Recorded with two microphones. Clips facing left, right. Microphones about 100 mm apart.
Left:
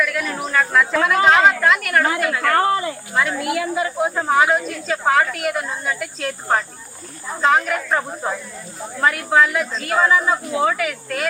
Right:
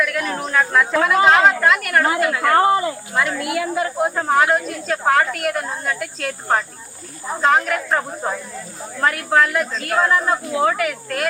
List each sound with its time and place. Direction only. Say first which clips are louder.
0.0 s speech: right 1 dB; centre (ahead or behind)
2.0 s speech: right 2 dB; 25° right (ahead or behind)
3.3 s speech: even; centre (ahead or behind)